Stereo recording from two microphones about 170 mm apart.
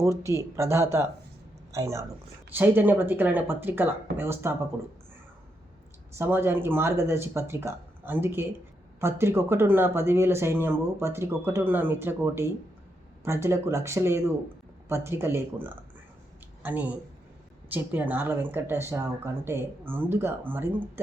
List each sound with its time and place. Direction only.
0.0 s speech: 15° right (ahead or behind)
6.1 s speech: 15° right (ahead or behind)